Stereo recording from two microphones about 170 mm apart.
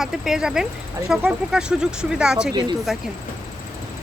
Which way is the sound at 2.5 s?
25° right (ahead or behind).